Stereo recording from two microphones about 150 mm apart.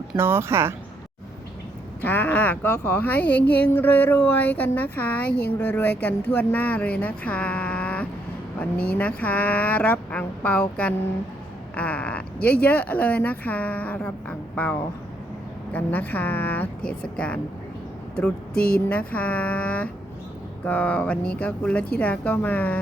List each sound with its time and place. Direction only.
0.2 s speech: 15° right (ahead or behind)
2.0 s speech: 10° left (ahead or behind)
18.9 s speech: 10° left (ahead or behind)